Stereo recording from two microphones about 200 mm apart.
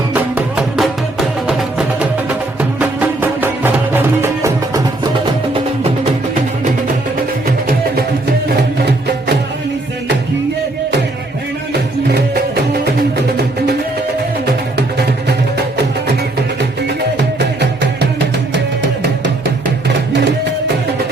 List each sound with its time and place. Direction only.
0.1 s music: 5° right (ahead or behind)
2.6 s music: 10° right (ahead or behind)
8.8 s music: 55° right (ahead or behind)